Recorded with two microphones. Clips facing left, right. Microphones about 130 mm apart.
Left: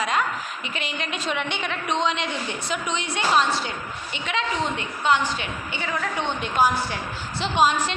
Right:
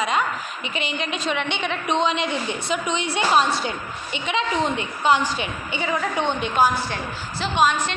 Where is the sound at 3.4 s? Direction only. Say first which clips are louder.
Right 1 dB; 10° right (ahead or behind).